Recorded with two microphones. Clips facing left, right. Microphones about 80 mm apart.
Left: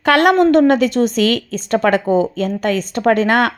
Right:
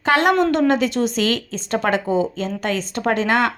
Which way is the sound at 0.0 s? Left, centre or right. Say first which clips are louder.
Left 5 dB; left.